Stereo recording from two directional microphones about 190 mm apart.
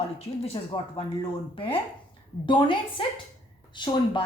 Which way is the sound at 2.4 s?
25° left (ahead or behind).